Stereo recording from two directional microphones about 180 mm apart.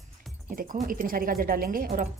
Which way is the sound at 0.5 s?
50° right (ahead or behind).